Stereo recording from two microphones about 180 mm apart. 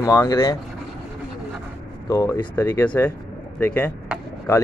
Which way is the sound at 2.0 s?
20° left (ahead or behind).